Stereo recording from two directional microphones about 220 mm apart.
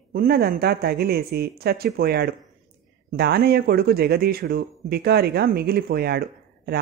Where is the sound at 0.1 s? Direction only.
40° right (ahead or behind).